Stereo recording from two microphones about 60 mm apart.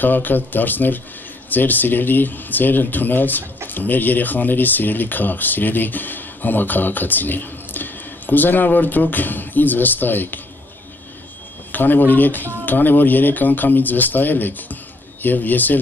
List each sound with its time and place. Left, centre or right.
0.0 s speech: left
11.7 s speech: left